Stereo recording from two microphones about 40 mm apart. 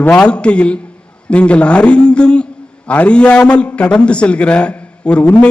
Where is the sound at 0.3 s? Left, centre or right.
Left.